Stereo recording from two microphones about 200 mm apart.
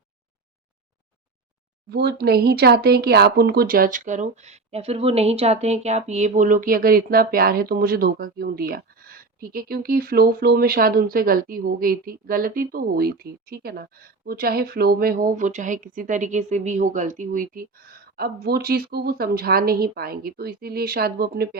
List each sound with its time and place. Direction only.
1.9 s speech: 55° right (ahead or behind)